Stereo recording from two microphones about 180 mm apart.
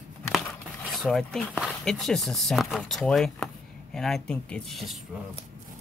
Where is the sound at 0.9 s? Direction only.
Centre (ahead or behind).